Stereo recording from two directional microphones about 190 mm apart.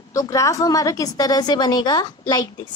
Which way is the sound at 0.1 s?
15° left (ahead or behind).